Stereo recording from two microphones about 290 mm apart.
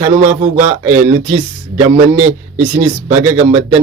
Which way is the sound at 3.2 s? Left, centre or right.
Centre.